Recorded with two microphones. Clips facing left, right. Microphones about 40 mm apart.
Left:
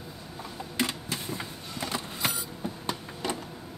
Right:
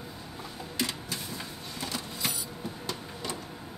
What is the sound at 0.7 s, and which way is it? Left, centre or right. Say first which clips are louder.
Vehicle: left 3 dB; left.